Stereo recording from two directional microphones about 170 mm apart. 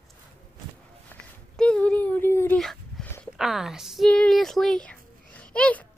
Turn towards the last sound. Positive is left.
turn(degrees=5)  # may be behind; listen again after turning